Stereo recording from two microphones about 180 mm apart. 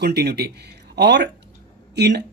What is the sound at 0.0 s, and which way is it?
Speech, 65° right (ahead or behind).